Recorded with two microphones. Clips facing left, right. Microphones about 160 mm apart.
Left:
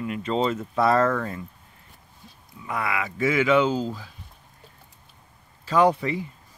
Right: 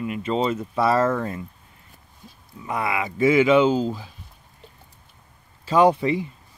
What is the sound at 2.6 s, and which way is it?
Speech, 25° right (ahead or behind).